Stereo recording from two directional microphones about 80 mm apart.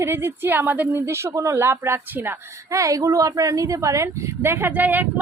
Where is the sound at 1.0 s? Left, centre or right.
Right.